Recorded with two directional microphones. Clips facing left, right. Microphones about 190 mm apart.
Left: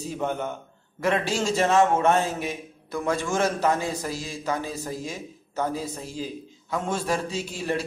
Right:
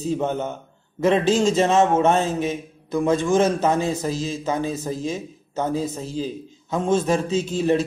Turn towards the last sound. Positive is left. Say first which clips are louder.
# right 8 dB
turn(degrees=-20)  # may be behind; listen again after turning